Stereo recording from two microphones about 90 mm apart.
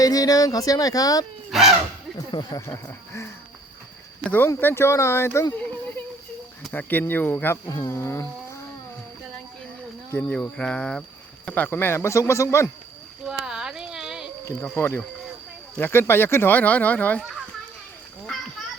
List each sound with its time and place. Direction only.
0.0 s speech: 40° left (ahead or behind)
1.5 s a sound: 5° right (ahead or behind)
2.3 s speech: 45° left (ahead or behind)
2.6 s speech: 35° left (ahead or behind)
4.2 s speech: 20° left (ahead or behind)
6.7 s speech: 20° left (ahead or behind)
7.7 s speech: 35° left (ahead or behind)
10.1 s speech: 20° left (ahead or behind)
13.2 s a sound: 5° right (ahead or behind)
14.4 s speech: 30° left (ahead or behind)